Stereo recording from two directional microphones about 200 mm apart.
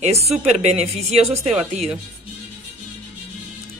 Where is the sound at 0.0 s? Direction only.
30° right (ahead or behind).